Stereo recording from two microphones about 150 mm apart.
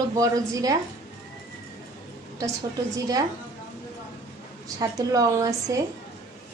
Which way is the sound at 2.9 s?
25° right (ahead or behind).